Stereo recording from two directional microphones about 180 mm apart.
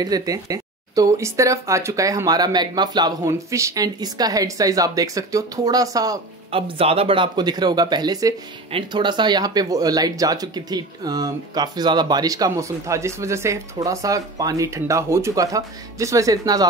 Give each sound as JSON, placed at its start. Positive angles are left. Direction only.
{"t": 0.0, "sound": "speech", "side_deg": -20}
{"t": 6.5, "sound": "speech", "side_deg": -30}